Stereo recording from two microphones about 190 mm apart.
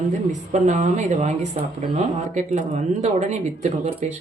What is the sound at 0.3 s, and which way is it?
Speech, 40° right (ahead or behind).